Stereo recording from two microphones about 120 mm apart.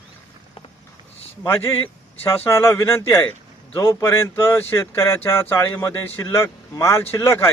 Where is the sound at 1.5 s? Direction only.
20° left (ahead or behind).